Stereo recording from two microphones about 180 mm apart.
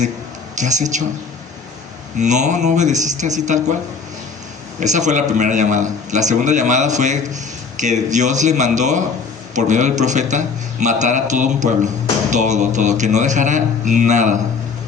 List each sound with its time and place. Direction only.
0.5 s speech: 40° right (ahead or behind)
2.1 s speech: 40° right (ahead or behind)
4.8 s speech: 40° right (ahead or behind)